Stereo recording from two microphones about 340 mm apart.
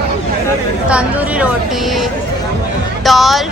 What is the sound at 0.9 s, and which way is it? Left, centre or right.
Speech, centre.